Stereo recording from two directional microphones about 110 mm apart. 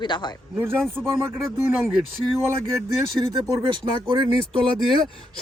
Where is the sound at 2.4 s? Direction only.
25° right (ahead or behind).